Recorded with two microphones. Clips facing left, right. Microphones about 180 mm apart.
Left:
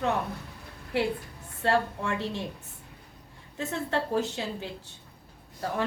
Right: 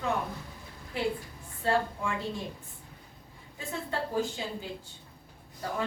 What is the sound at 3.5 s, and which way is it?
A woman's voice, 75° left (ahead or behind).